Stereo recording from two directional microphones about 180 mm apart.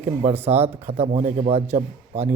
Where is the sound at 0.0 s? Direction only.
35° right (ahead or behind).